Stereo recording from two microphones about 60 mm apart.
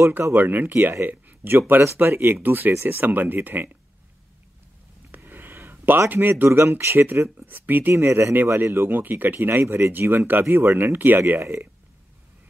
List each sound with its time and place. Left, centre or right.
0.3 s speech: right
5.1 s a sound: right
6.0 s speech: right
7.9 s speech: right
8.9 s speech: right